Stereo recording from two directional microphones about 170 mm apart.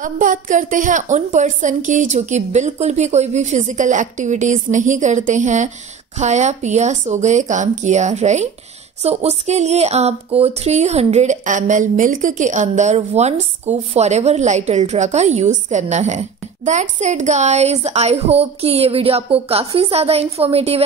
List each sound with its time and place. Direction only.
0.0 s a woman's voice: 50° right (ahead or behind); by 20.8 s 35° right (ahead or behind)